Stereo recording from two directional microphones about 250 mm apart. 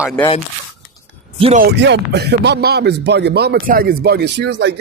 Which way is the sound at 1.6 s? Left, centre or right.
Right.